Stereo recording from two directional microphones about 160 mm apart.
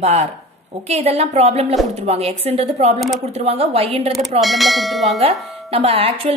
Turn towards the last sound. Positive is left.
turn(degrees=-35)  # may be behind; listen again after turning